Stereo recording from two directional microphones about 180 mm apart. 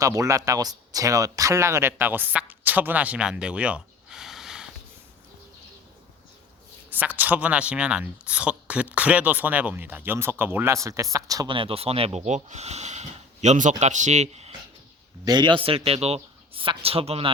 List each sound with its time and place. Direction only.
0.0 s speech: 20° right (ahead or behind)
6.9 s speech: 10° right (ahead or behind); by 14.5 s 40° right (ahead or behind)
15.2 s a man's voice: 25° right (ahead or behind)